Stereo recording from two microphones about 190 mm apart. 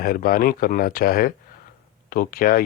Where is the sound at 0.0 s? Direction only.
50° left (ahead or behind).